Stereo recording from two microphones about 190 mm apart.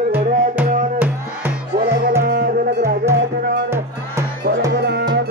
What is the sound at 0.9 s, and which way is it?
Music, 10° right (ahead or behind).